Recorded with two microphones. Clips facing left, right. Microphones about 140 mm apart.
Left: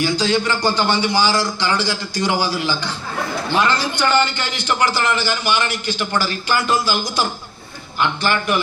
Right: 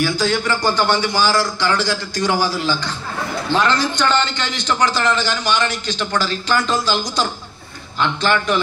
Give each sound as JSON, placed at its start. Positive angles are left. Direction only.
{"t": 0.0, "sound": "a man's voice", "side_deg": 15}